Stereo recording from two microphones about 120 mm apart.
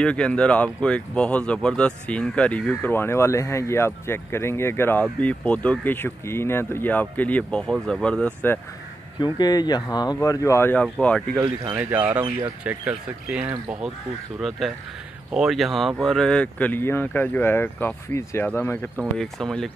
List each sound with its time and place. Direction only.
0.0 s speech: 10° left (ahead or behind)
9.2 s speech: 35° left (ahead or behind); by 11.2 s 10° left (ahead or behind)
11.7 s speech: 15° right (ahead or behind); by 18.9 s 15° left (ahead or behind)
19.1 s speech: 5° left (ahead or behind)